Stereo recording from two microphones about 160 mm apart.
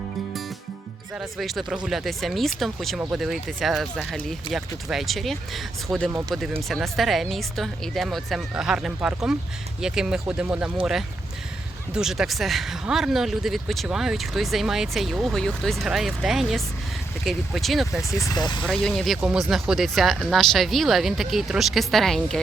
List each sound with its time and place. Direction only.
1.1 s speech: centre (ahead or behind)
11.9 s speech: 5° right (ahead or behind)
18.0 s speech: 20° left (ahead or behind)
18.7 s speech: centre (ahead or behind)